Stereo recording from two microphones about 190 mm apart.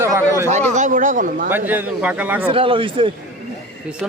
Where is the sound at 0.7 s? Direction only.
40° right (ahead or behind).